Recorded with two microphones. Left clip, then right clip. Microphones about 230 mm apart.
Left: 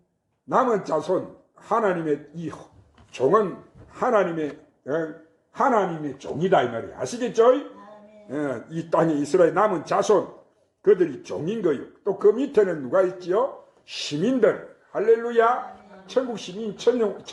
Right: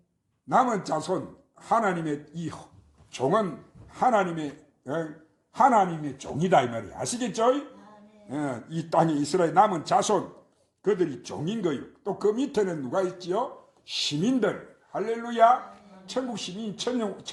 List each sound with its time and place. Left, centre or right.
0.4 s speech: right
3.9 s a man's voice: right
5.5 s speech: right